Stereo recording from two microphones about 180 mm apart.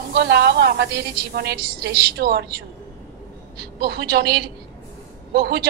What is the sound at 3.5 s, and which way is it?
Speech, 60° right (ahead or behind).